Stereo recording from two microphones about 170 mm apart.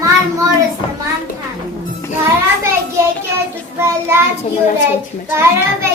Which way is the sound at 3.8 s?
15° right (ahead or behind).